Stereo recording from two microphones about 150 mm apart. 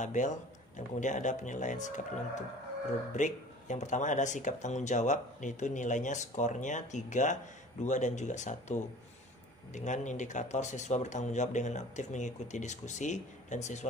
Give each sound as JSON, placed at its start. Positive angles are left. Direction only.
{"t": 0.0, "sound": "speech", "side_deg": 55}
{"t": 3.2, "sound": "speech", "side_deg": 55}